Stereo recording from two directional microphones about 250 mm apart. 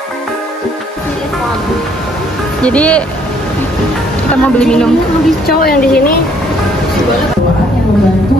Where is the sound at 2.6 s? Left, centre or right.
Centre.